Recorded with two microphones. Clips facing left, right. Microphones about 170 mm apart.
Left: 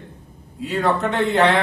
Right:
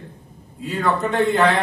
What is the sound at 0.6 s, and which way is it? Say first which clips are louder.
Speech: left 1 dB; 75° left (ahead or behind).